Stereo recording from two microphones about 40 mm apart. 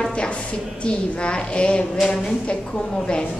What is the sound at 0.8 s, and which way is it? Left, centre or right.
A woman's voice, left.